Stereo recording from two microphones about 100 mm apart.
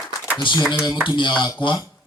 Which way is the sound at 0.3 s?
50° left (ahead or behind).